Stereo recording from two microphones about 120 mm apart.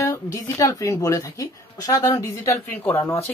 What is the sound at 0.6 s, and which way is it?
Speech, 30° left (ahead or behind).